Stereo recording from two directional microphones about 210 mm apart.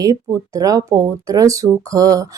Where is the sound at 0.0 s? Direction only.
15° right (ahead or behind).